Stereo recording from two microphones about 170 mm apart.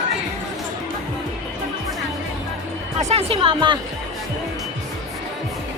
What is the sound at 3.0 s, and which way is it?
Music, 40° right (ahead or behind).